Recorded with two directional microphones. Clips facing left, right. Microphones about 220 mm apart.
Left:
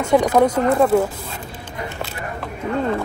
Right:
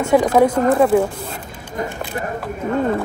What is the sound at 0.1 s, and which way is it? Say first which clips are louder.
Speech: right 1 dB; 5° right (ahead or behind).